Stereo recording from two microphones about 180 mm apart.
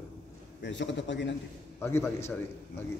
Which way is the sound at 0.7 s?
85° left.